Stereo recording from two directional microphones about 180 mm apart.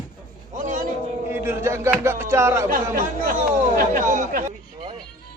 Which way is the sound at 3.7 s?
45° right (ahead or behind).